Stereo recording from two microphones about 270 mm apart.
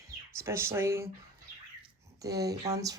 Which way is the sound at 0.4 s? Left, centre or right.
Centre.